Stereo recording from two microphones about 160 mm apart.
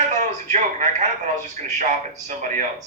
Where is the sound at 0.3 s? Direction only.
45° right (ahead or behind).